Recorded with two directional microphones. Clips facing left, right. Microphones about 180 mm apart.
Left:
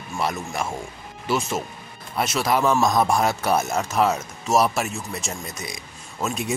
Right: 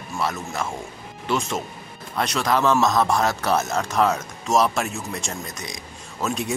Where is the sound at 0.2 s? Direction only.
15° left (ahead or behind).